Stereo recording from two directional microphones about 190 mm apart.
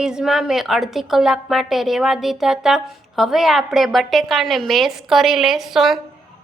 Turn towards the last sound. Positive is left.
turn(degrees=0)  # may be behind; listen again after turning